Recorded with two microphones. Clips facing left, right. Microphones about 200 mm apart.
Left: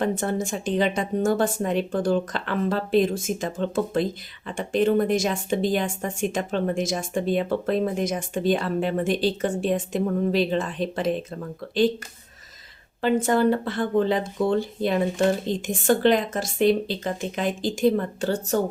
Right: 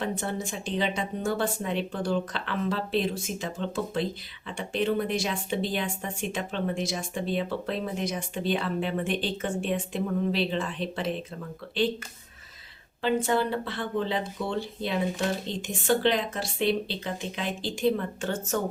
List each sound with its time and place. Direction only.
0.2 s speech: 45° left (ahead or behind)
13.0 s speech: 45° left (ahead or behind)